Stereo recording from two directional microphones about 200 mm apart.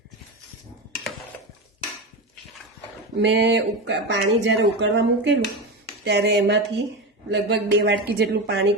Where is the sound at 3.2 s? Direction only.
60° right (ahead or behind).